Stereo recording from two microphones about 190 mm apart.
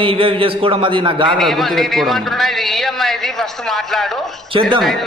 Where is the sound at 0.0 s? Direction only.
30° right (ahead or behind).